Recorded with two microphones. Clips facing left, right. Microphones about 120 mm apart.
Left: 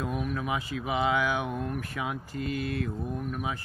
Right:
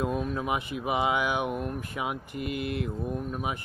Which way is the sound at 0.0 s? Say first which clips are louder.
Right 2 dB; 30° right (ahead or behind).